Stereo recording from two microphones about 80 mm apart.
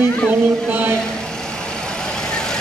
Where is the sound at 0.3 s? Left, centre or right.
Right.